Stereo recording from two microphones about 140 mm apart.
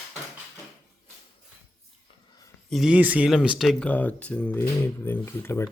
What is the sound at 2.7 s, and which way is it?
Speech, centre (ahead or behind).